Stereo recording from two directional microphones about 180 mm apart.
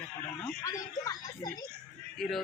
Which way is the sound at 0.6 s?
20° left (ahead or behind).